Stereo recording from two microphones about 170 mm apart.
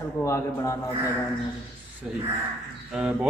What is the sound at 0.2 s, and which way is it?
Speech, 15° left (ahead or behind).